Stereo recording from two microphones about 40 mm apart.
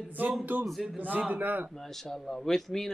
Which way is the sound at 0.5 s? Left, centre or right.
Right.